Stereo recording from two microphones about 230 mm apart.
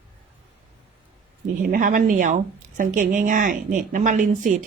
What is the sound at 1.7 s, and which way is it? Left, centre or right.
Speech, right.